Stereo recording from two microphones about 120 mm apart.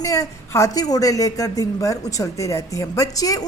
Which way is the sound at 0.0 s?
25° left (ahead or behind).